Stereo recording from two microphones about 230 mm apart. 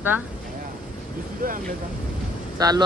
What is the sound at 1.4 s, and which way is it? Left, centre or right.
Speech, right.